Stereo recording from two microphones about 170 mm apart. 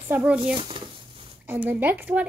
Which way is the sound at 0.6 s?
30° right (ahead or behind).